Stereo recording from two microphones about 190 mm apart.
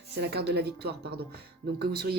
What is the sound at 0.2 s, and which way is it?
Speech, 60° right (ahead or behind).